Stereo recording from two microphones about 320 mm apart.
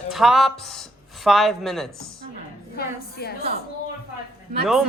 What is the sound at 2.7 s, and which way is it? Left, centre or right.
Speech, left.